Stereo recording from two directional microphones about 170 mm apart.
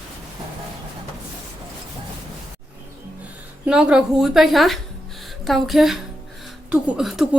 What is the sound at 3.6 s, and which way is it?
A woman's voice, 5° right (ahead or behind).